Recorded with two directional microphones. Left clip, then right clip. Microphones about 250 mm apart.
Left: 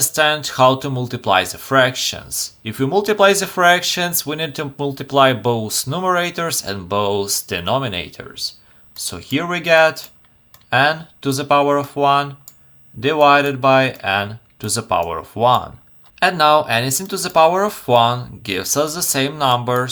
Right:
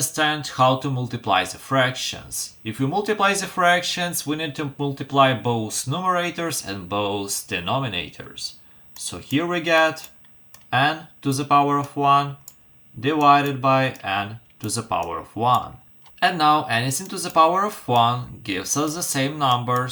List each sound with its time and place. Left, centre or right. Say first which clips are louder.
0.1 s speech: left 6 dB; left